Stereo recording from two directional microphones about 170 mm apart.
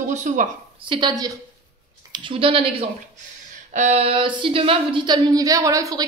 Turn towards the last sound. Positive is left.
turn(degrees=-20)  # may be behind; listen again after turning